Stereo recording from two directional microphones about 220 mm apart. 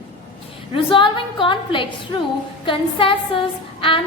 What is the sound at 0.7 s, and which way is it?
A woman's voice, 25° left (ahead or behind).